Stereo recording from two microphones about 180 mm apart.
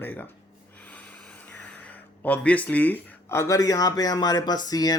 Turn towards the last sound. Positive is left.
turn(degrees=20)  # may be behind; listen again after turning